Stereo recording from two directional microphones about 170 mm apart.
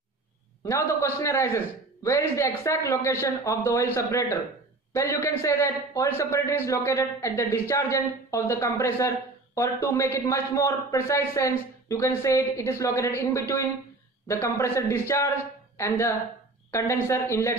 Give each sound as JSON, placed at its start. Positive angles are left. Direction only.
{"t": 0.7, "sound": "a man's voice", "side_deg": 15}